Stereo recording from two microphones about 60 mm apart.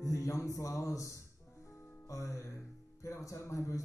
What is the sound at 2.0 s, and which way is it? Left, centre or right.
Speech, left.